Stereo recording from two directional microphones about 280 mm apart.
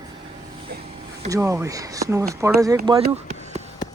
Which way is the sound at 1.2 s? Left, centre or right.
Centre.